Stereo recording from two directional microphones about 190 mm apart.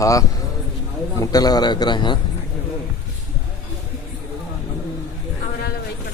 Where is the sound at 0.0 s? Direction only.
15° left (ahead or behind).